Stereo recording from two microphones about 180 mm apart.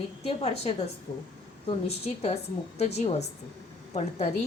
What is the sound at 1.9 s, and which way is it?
A woman's voice, 35° left (ahead or behind).